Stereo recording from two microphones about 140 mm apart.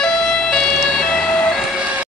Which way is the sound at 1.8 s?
10° right (ahead or behind).